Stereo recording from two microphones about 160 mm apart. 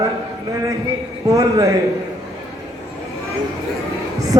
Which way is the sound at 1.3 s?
20° right (ahead or behind).